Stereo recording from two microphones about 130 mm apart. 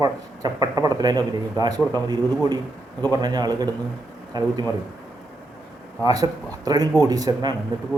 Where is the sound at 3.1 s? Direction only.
30° right (ahead or behind).